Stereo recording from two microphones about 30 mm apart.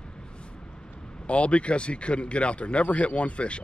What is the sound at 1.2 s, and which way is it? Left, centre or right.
Speech, left.